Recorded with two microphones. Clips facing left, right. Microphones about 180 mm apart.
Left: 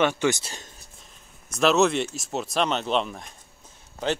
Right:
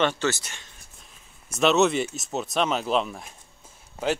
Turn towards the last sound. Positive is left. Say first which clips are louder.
# right 1 dB
turn(degrees=-5)  # may be behind; listen again after turning